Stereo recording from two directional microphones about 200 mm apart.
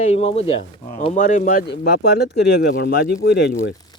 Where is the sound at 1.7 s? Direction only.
55° left (ahead or behind).